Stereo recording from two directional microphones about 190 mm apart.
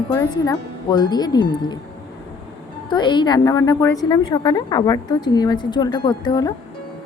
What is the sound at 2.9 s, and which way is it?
A woman's voice, 25° left (ahead or behind).